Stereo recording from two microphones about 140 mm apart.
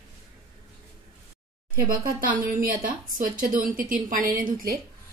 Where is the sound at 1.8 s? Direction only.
90° right.